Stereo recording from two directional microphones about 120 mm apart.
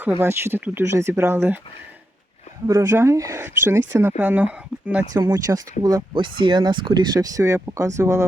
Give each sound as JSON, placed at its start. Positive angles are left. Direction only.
{"t": 0.0, "sound": "speech", "side_deg": -20}
{"t": 2.6, "sound": "speech", "side_deg": -25}
{"t": 5.1, "sound": "speech", "side_deg": -30}